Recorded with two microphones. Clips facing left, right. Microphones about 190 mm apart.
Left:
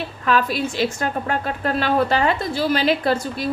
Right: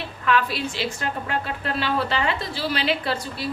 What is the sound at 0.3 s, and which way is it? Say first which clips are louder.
A woman's voice: left 3 dB; 40° left (ahead or behind).